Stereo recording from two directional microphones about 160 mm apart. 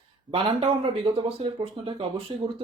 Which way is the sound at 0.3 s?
35° right (ahead or behind).